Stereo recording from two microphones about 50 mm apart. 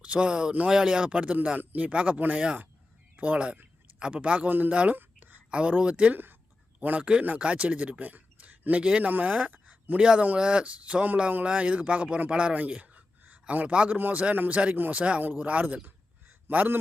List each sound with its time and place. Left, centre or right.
0.0 s speech: right
4.4 s speech: right
4.7 s speech: right
4.9 s a sound: right
5.5 s speech: right
10.0 s speech: centre
13.9 s a man's voice: right